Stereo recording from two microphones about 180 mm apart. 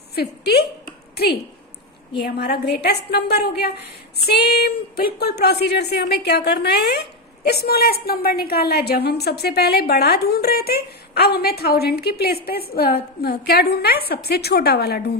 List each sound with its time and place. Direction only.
0.2 s a woman's voice: 65° left (ahead or behind)
2.2 s a woman's voice: 65° left (ahead or behind)